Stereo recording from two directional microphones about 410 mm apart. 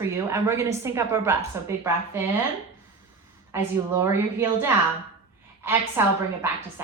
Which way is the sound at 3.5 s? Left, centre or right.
Centre.